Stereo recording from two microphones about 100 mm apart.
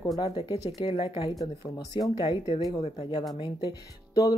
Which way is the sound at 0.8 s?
65° left (ahead or behind).